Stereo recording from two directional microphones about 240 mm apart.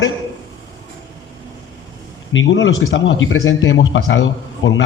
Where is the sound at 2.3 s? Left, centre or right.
Left.